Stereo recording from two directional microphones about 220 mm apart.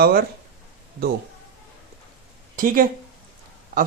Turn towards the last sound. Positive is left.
turn(degrees=-40)  # may be behind; listen again after turning